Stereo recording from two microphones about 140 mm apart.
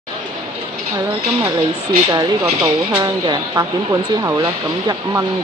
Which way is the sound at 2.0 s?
25° right (ahead or behind).